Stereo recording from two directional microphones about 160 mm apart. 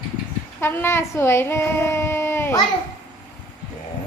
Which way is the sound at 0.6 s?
15° left (ahead or behind).